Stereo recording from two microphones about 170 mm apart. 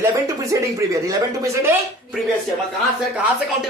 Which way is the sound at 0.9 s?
20° right (ahead or behind).